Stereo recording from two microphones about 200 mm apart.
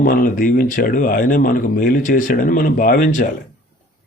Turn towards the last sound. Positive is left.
turn(degrees=40)  # may be behind; listen again after turning